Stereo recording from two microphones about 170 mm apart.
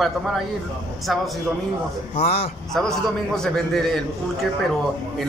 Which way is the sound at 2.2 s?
35° left (ahead or behind).